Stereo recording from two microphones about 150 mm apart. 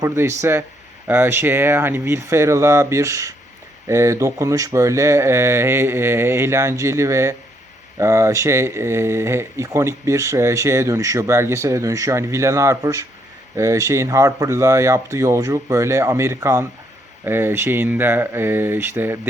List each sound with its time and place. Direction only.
0.0 s speech: 20° right (ahead or behind)